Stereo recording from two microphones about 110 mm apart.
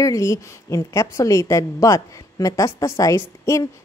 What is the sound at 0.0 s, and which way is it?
A woman's voice, 30° left (ahead or behind).